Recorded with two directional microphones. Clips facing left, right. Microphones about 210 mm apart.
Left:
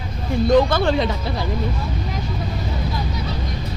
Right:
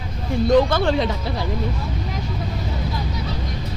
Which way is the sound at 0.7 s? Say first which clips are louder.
Left 1 dB; 5° left (ahead or behind).